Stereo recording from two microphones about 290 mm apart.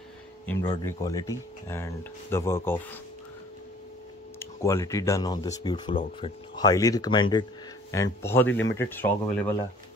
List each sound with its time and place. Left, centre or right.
0.5 s speech: centre
4.4 s speech: centre